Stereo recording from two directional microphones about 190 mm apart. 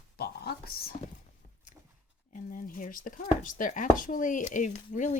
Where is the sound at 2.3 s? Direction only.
45° left (ahead or behind).